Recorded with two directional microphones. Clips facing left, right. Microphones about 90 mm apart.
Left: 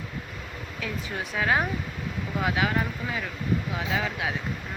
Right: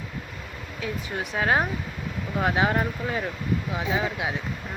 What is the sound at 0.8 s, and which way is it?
Speech, 20° right (ahead or behind).